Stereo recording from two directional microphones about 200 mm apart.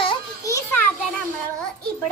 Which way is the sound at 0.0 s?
20° left (ahead or behind).